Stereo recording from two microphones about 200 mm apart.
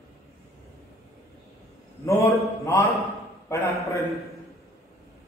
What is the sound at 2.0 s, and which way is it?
A man's voice, 15° left (ahead or behind).